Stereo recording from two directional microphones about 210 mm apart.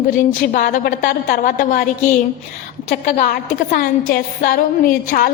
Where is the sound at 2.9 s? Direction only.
40° left (ahead or behind).